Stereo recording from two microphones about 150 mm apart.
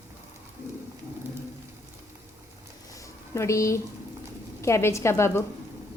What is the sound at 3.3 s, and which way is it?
A woman's voice, 20° left (ahead or behind).